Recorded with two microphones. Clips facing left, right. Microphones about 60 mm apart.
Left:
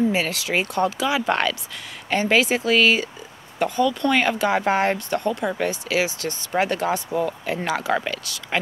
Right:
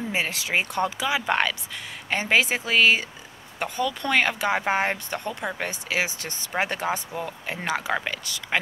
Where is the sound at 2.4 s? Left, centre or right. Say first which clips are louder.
Left 2 dB; right.